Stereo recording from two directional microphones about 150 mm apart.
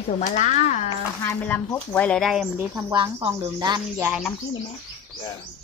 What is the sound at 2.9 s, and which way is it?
Speech, 30° right (ahead or behind).